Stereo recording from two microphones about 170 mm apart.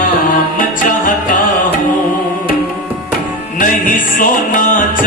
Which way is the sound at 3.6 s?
55° left (ahead or behind).